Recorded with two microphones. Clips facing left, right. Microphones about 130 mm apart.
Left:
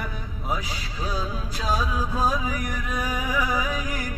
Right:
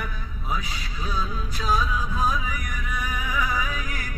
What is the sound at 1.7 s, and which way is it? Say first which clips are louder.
Music: right 1 dB; 40° left (ahead or behind).